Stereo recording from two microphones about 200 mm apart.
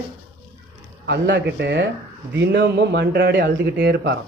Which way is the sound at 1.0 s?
60° right (ahead or behind).